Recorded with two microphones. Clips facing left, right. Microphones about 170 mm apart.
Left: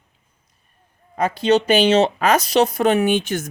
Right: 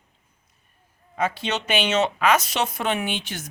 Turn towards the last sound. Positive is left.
turn(degrees=45)  # may be behind; listen again after turning